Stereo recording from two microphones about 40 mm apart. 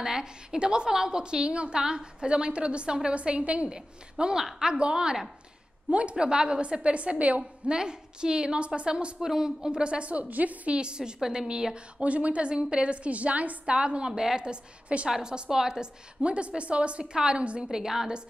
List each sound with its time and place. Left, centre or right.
0.0 s a woman's voice: centre
3.6 s a woman's voice: centre; by 7.4 s right
7.6 s a woman's voice: right
9.7 s a woman's voice: right
10.8 s a woman's voice: right
12.0 s a woman's voice: right
13.7 s a woman's voice: right
16.2 s a woman's voice: right
17.6 s a woman's voice: centre